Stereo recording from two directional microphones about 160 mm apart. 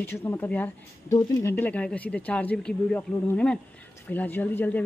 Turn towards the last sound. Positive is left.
turn(degrees=10)  # may be behind; listen again after turning